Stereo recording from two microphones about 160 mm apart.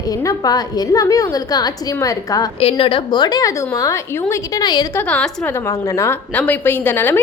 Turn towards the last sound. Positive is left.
turn(degrees=15)  # may be behind; listen again after turning